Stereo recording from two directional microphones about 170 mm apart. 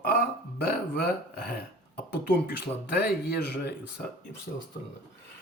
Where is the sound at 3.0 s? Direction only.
70° left (ahead or behind).